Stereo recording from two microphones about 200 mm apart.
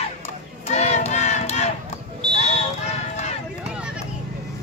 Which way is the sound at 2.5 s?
35° left (ahead or behind).